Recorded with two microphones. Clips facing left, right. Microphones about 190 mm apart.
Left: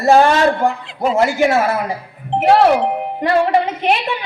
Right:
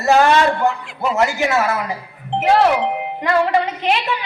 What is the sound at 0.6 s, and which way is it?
A man's voice, 50° left (ahead or behind).